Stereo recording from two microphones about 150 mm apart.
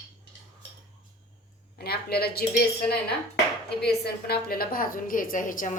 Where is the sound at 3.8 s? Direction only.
90° left.